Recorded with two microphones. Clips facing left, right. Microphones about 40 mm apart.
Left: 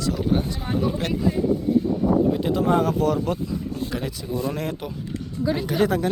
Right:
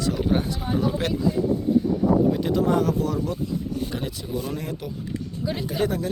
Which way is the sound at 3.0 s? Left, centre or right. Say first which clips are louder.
Left 4 dB; left.